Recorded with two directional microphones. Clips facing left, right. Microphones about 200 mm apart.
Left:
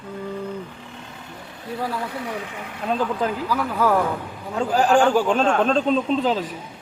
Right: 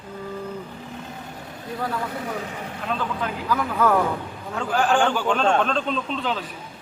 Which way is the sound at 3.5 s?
10° left (ahead or behind).